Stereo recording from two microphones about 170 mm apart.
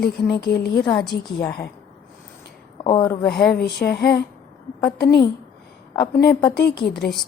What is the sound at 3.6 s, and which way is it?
Speech, 70° left (ahead or behind).